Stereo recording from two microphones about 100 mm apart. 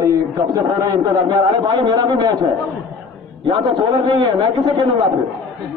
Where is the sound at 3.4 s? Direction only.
50° right (ahead or behind).